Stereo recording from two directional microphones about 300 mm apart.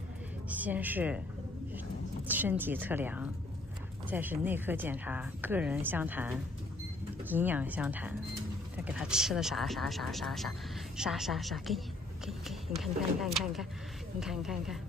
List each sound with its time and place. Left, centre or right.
0.5 s speech: centre
2.2 s speech: centre